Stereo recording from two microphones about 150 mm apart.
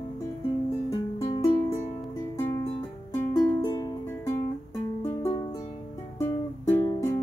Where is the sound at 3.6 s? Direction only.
25° left (ahead or behind).